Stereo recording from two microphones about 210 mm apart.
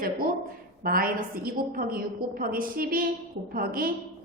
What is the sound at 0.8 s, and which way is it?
A woman's voice, 45° right (ahead or behind).